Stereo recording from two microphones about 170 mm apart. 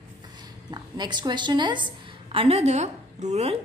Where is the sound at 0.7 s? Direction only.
25° right (ahead or behind).